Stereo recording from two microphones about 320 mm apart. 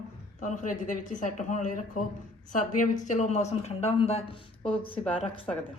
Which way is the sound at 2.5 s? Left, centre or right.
Left.